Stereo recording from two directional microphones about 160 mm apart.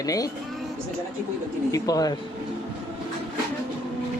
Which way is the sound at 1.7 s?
20° left (ahead or behind).